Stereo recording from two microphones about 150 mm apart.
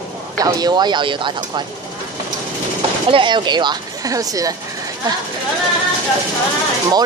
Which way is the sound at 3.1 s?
35° right (ahead or behind).